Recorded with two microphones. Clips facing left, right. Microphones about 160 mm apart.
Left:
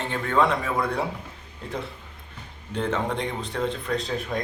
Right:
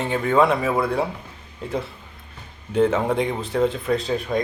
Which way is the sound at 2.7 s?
5° right (ahead or behind).